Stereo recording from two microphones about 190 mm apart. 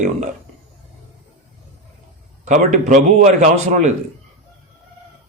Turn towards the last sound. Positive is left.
turn(degrees=-40)  # may be behind; listen again after turning